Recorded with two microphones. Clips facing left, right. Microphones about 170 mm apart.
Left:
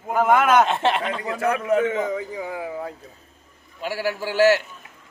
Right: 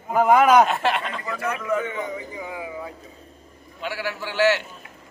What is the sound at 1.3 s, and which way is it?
Speech, 60° left (ahead or behind).